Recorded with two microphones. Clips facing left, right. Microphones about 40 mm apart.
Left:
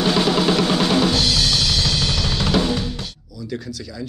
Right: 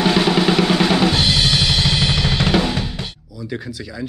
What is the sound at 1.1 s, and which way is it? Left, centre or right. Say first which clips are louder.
Drum kit: right 2 dB; right.